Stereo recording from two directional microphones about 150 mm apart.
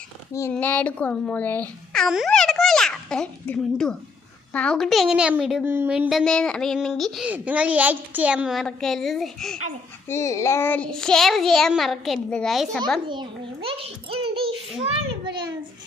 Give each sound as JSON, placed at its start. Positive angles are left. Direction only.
{"t": 0.5, "sound": "a child's voice", "side_deg": 10}
{"t": 5.6, "sound": "speech", "side_deg": -15}
{"t": 6.1, "sound": "a child's voice", "side_deg": 0}
{"t": 10.1, "sound": "a child's voice", "side_deg": 20}
{"t": 13.1, "sound": "a child's voice", "side_deg": -35}
{"t": 14.8, "sound": "children playing", "side_deg": -30}